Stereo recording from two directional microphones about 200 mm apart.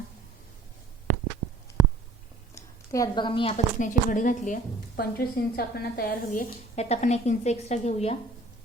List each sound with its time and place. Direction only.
2.6 s a woman's voice: 15° left (ahead or behind); by 8.2 s 30° left (ahead or behind)